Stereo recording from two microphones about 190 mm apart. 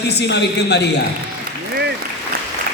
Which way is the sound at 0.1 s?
60° left (ahead or behind).